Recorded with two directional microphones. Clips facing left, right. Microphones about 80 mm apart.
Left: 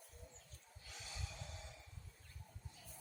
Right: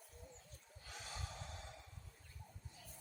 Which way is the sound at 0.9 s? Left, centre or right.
Right.